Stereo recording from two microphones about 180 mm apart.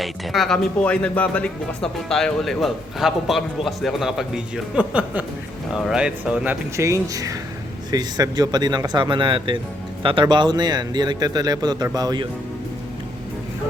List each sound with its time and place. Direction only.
0.0 s speech: centre (ahead or behind); by 12.3 s 25° right (ahead or behind)